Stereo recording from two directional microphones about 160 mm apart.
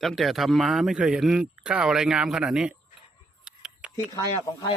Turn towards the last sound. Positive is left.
turn(degrees=25)  # may be behind; listen again after turning